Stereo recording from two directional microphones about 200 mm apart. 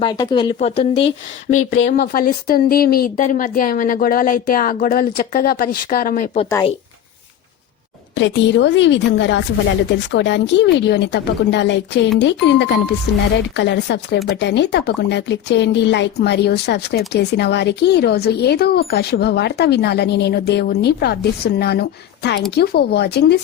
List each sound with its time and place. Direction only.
0.0 s a woman's voice: 20° left (ahead or behind)
1.0 s speech: 40° left (ahead or behind)
6.5 s a woman's voice: 25° left (ahead or behind)
8.1 s speech: 65° left (ahead or behind)